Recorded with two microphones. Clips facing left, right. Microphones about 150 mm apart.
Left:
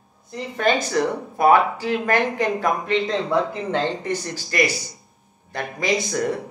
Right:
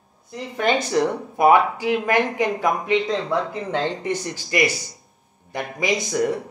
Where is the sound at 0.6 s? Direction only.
20° right (ahead or behind).